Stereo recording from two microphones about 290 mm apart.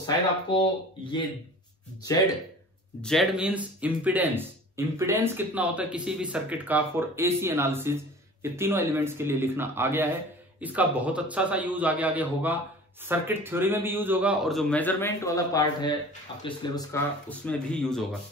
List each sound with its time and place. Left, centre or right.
0.0 s speech: centre
3.0 s a man's voice: centre